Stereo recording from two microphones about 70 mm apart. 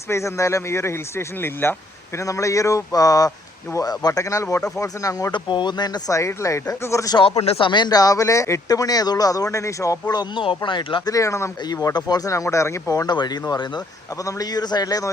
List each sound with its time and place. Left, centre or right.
0.1 s speech: left
2.1 s speech: left
6.1 s speech: left
7.1 s speech: left
8.7 s speech: left
10.1 s speech: left
11.1 s speech: left
11.9 s a man's voice: left
12.3 s speech: left
12.9 s speech: left
14.3 s a man's voice: left